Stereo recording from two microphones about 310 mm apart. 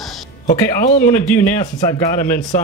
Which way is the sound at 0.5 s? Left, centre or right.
Left.